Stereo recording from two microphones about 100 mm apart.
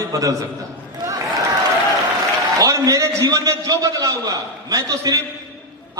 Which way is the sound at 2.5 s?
35° right (ahead or behind).